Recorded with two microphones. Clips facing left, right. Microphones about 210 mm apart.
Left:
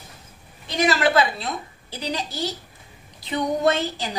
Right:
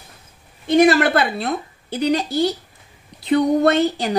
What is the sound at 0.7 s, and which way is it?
Speech, 55° right (ahead or behind).